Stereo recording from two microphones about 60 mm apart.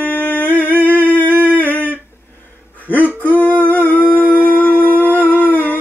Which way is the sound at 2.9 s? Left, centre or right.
Left.